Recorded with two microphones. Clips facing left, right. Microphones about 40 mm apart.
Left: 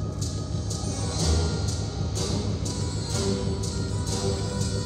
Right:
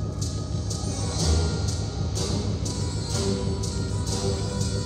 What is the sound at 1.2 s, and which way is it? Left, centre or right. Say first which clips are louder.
Music: even; left.